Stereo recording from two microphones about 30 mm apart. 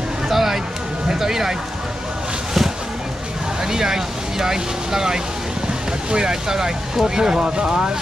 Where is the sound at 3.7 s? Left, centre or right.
Centre.